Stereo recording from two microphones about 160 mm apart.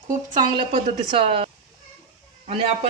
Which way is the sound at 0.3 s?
30° right (ahead or behind).